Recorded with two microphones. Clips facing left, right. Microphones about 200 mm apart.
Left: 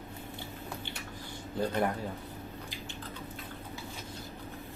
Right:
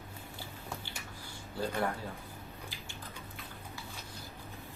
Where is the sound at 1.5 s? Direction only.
20° left (ahead or behind).